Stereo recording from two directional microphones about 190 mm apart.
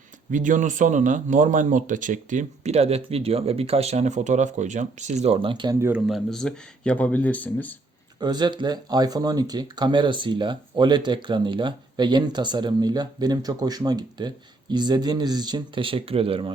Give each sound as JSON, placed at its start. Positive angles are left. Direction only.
{"t": 0.3, "sound": "speech", "side_deg": -40}
{"t": 5.8, "sound": "speech", "side_deg": -5}
{"t": 8.2, "sound": "speech", "side_deg": -20}